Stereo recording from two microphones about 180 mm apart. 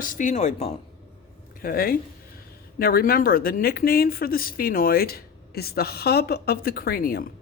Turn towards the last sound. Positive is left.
turn(degrees=55)  # may be behind; listen again after turning